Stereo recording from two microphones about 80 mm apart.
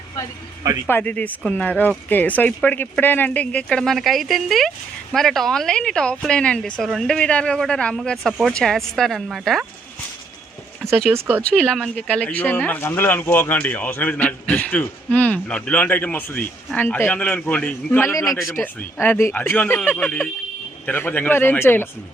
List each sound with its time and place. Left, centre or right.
0.9 s speech: left; by 9.6 s centre
11.1 s speech: right
11.4 s speech: centre
12.2 s speech: left
18.1 s a man's voice: left
18.6 s speech: left